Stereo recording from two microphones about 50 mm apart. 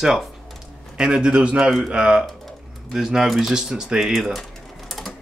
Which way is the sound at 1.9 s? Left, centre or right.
Centre.